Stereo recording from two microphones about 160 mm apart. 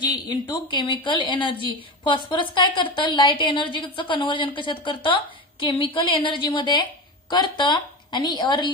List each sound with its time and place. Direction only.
0.0 s a woman's voice: 30° left (ahead or behind)